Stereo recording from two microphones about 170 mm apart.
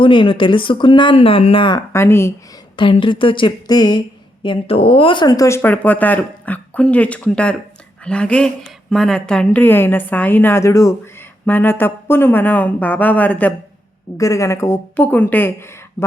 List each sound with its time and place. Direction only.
0.0 s speech: 30° left (ahead or behind)
1.9 s speech: 15° left (ahead or behind)
2.7 s speech: 30° left (ahead or behind); by 16.0 s 15° left (ahead or behind)